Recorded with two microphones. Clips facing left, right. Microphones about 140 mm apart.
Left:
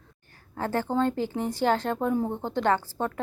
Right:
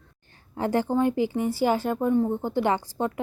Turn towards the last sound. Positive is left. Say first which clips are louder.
# right 1 dB
turn(degrees=-15)  # may be behind; listen again after turning